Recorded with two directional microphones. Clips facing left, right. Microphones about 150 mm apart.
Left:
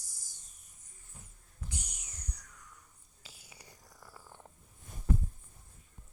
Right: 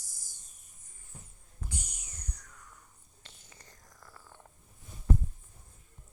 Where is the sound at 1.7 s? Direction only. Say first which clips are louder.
Right 2 dB; 50° right (ahead or behind).